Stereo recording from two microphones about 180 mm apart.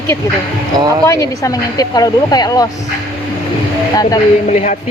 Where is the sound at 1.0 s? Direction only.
20° left (ahead or behind).